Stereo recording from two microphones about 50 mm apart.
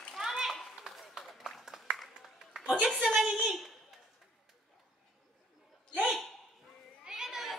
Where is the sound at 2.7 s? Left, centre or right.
Centre.